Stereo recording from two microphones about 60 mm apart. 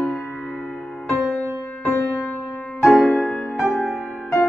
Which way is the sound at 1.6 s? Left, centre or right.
Left.